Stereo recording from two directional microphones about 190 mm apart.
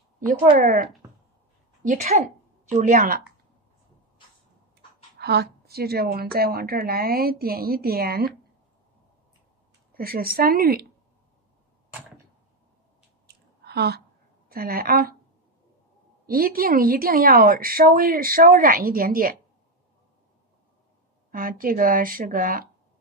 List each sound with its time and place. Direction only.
0.6 s a woman's voice: 45° right (ahead or behind)
5.2 s a woman's voice: 60° right (ahead or behind)
9.9 s a woman's voice: 50° right (ahead or behind)
13.3 s a sound: 60° right (ahead or behind)
14.5 s a woman's voice: 50° right (ahead or behind)
16.3 s a woman's voice: 50° right (ahead or behind)
21.3 s a woman's voice: 50° right (ahead or behind)